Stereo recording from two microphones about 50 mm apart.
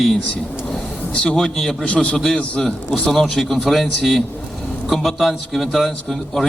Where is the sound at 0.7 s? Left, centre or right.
Centre.